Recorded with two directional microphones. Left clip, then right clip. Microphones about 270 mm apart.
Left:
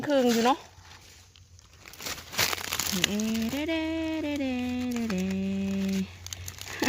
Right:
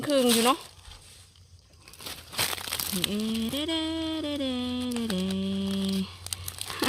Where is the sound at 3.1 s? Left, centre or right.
Centre.